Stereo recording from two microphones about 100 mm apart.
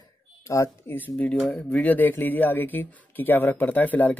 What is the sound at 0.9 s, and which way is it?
Speech, 15° left (ahead or behind).